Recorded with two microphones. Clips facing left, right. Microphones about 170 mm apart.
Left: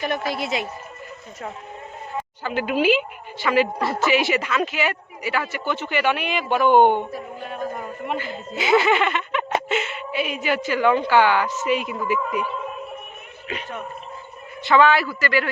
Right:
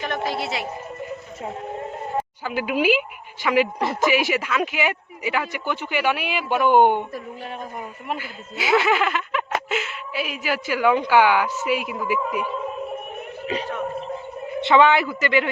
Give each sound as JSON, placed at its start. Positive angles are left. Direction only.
{"t": 0.3, "sound": "a woman's voice", "side_deg": 15}
{"t": 2.4, "sound": "speech", "side_deg": -10}
{"t": 8.0, "sound": "a woman's voice", "side_deg": -5}
{"t": 14.6, "sound": "a man's voice", "side_deg": -20}